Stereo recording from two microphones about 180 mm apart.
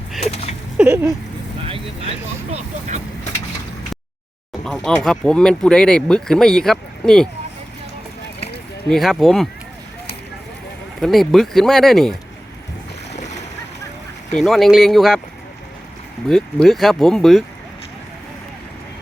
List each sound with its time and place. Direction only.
0.2 s a sound: 35° left (ahead or behind)
0.8 s speech: 10° right (ahead or behind)
1.6 s speech: 30° right (ahead or behind)
4.6 s speech: 5° left (ahead or behind)
8.9 s speech: centre (ahead or behind)
11.0 s speech: centre (ahead or behind)
14.3 s speech: centre (ahead or behind)
16.3 s speech: centre (ahead or behind)